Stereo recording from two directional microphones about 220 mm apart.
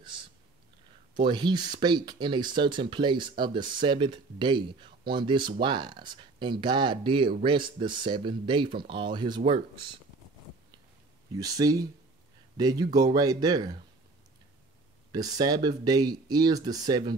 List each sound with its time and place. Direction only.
0.1 s a sound: 20° right (ahead or behind)
1.1 s speech: 20° right (ahead or behind)
11.3 s speech: 15° right (ahead or behind)
15.1 s speech: 15° right (ahead or behind)